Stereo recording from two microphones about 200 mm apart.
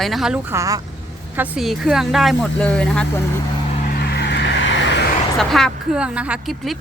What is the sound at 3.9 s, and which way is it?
Vehicle, 55° left (ahead or behind).